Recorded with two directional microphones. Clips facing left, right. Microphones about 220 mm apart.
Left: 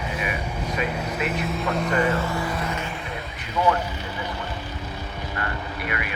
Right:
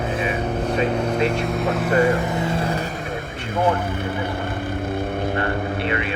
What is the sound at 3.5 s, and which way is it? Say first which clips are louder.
Vehicle: right 2 dB; 50° right (ahead or behind).